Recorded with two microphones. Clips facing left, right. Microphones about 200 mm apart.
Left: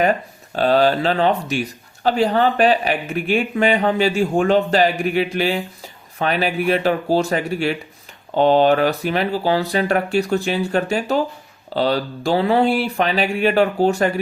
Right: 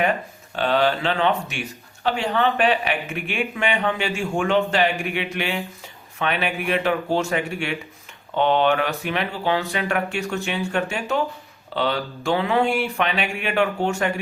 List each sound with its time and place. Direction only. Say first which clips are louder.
0.0 s speech: left 4 dB; 40° left (ahead or behind)